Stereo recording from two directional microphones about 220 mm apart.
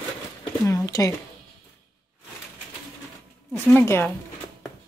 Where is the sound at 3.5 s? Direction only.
10° left (ahead or behind).